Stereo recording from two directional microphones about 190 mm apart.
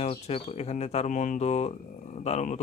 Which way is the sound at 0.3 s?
35° left (ahead or behind).